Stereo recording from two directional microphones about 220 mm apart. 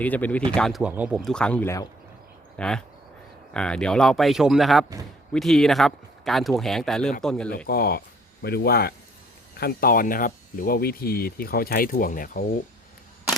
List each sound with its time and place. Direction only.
0.0 s speech: 5° left (ahead or behind)
7.7 s speech: 45° left (ahead or behind)